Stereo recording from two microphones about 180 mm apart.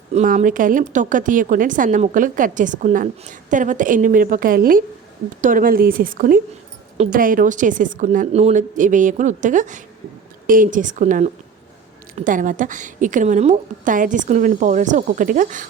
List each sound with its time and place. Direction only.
0.1 s a woman's voice: 40° right (ahead or behind)